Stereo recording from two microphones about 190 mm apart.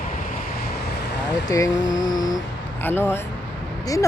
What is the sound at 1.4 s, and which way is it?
Speech, 20° left (ahead or behind).